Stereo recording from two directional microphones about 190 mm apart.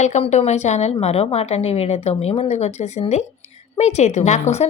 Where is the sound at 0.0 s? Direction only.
35° left (ahead or behind).